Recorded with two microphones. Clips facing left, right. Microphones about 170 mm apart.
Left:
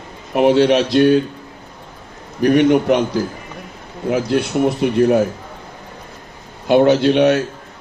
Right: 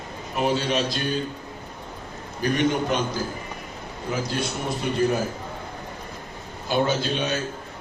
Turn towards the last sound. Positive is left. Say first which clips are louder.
# left 13 dB
turn(degrees=70)  # may be behind; listen again after turning